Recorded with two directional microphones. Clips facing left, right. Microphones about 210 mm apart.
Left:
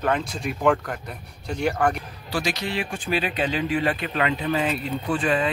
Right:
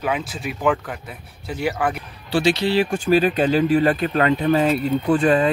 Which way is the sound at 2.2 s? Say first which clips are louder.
Right 8 dB; 30° right (ahead or behind).